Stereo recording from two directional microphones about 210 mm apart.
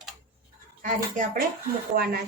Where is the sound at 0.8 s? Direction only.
40° right (ahead or behind).